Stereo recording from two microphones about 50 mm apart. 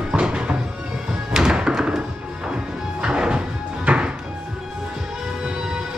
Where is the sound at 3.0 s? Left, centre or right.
Right.